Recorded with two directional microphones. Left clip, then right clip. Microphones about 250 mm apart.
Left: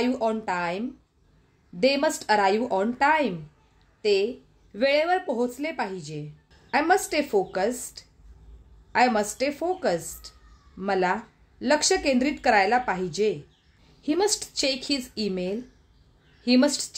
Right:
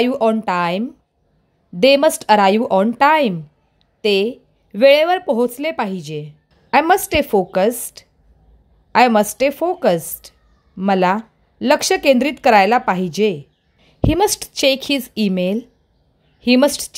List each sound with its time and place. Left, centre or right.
0.0 s a woman's voice: right